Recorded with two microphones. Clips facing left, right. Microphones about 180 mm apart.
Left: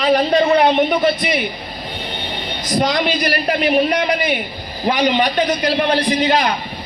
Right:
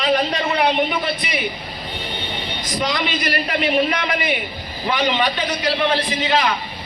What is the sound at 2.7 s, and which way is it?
A man's voice, 45° left (ahead or behind).